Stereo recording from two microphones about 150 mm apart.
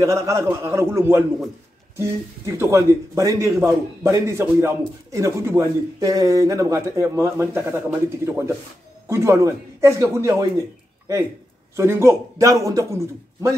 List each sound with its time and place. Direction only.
0.0 s speech: 20° right (ahead or behind)
11.7 s speech: 20° right (ahead or behind)